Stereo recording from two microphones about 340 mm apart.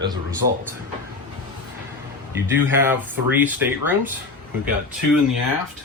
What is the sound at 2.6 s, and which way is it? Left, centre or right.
Speech, centre.